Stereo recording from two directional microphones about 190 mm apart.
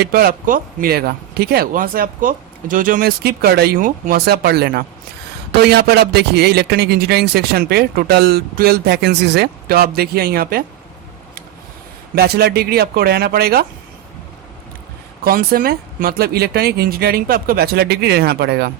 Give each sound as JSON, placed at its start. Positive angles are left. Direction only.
{"t": 0.0, "sound": "a man's voice", "side_deg": -50}
{"t": 12.1, "sound": "a man's voice", "side_deg": -55}
{"t": 15.2, "sound": "speech", "side_deg": -50}